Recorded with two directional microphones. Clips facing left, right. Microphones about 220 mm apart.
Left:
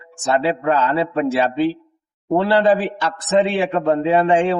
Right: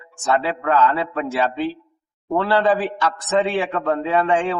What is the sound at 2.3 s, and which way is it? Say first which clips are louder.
A man's voice: left 3 dB; 25° left (ahead or behind).